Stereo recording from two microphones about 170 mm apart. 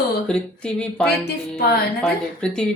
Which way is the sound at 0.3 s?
5° left (ahead or behind).